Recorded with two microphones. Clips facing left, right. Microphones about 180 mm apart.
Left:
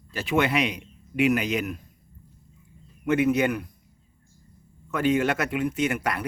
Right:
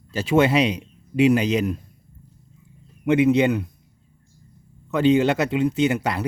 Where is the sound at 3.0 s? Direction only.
20° right (ahead or behind).